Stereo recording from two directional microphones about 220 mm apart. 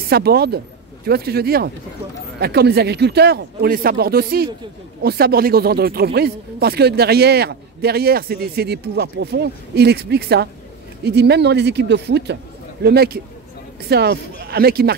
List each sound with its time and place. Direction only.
0.1 s speech: 45° right (ahead or behind)